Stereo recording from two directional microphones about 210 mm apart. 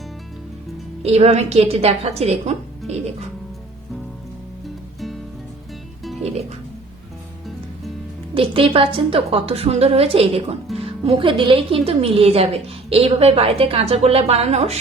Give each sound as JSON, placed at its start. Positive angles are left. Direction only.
{"t": 1.0, "sound": "speech", "side_deg": -30}
{"t": 8.4, "sound": "speech", "side_deg": -25}